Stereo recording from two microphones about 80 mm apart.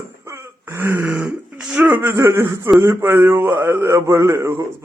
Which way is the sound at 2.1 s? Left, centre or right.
Right.